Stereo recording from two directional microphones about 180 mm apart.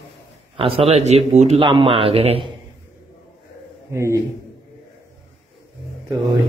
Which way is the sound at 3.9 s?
15° right (ahead or behind).